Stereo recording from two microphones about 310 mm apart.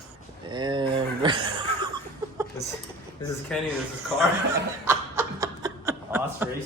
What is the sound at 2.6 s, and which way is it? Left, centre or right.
Speech, centre.